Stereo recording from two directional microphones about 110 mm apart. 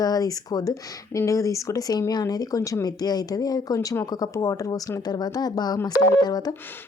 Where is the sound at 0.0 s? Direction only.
35° left (ahead or behind).